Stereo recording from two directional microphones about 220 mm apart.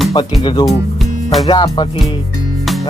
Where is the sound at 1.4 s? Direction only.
25° left (ahead or behind).